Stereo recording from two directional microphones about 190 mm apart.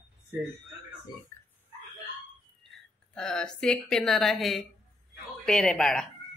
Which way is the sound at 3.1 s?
5° left (ahead or behind).